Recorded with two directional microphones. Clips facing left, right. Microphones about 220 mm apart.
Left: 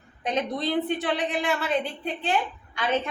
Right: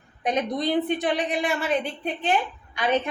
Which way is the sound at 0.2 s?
15° right (ahead or behind).